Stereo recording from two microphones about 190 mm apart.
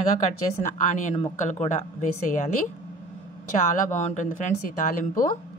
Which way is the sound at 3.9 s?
40° left (ahead or behind).